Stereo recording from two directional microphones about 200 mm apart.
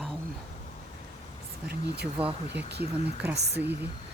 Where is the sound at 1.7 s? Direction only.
55° right (ahead or behind).